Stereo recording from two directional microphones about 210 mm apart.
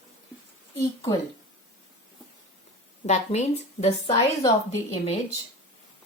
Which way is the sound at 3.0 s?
30° left (ahead or behind).